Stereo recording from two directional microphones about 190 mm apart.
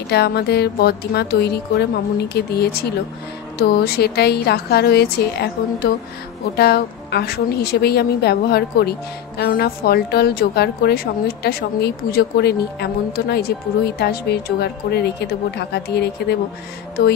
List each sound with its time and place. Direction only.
0.1 s a woman's voice: 60° left (ahead or behind)